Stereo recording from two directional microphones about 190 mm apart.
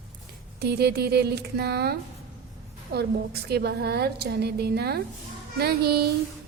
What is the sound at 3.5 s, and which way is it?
A woman's voice, 60° right (ahead or behind).